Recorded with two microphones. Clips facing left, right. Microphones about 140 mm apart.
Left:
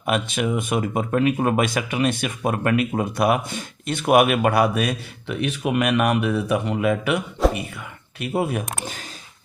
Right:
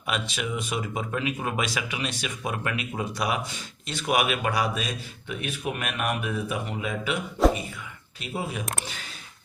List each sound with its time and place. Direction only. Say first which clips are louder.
0.0 s speech: left 8 dB; 50° left (ahead or behind)
7.4 s a sound: even; centre (ahead or behind)
8.2 s speech: left 9 dB; 60° left (ahead or behind)
8.8 s speech: left 5 dB; 45° left (ahead or behind)